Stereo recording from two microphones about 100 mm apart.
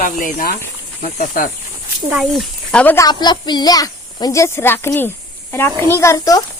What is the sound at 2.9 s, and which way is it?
A child's voice, 45° left (ahead or behind).